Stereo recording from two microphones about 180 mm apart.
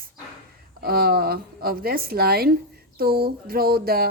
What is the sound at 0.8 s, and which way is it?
A woman's voice, 60° right (ahead or behind).